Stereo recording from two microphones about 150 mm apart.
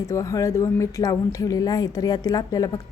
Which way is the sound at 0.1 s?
20° left (ahead or behind).